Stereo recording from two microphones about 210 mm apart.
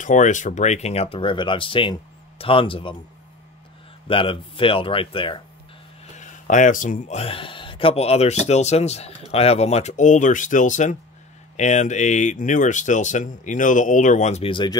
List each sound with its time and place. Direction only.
0.0 s speech: 35° left (ahead or behind)
4.1 s speech: 25° left (ahead or behind)
6.1 s speech: 35° left (ahead or behind)